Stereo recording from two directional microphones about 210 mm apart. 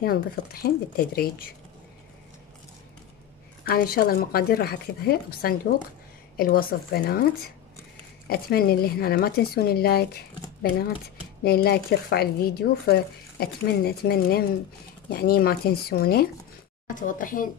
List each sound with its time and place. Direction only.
0.0 s speech: 45° left (ahead or behind)
3.6 s a woman's voice: 45° left (ahead or behind)